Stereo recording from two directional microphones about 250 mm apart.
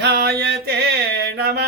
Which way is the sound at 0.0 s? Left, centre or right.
Right.